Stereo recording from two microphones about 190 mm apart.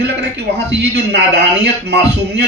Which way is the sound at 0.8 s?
60° right (ahead or behind).